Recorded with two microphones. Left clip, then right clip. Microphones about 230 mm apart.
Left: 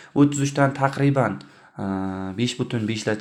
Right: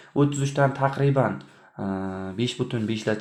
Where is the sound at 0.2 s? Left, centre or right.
Left.